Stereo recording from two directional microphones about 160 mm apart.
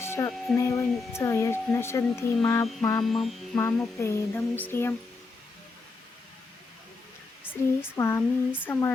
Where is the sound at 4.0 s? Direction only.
15° left (ahead or behind).